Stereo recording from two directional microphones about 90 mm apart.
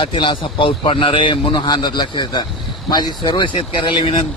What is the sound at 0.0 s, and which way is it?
A man's voice, 70° left (ahead or behind).